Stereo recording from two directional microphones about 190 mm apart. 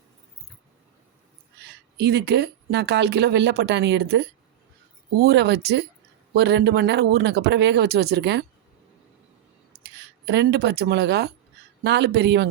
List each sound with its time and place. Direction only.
1.6 s speech: 60° right (ahead or behind)
9.8 s speech: 65° right (ahead or behind)